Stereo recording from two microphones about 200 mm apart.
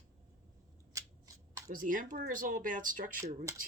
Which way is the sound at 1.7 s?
40° right (ahead or behind).